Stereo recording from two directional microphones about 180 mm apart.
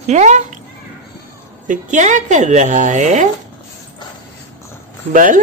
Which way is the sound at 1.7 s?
40° right (ahead or behind).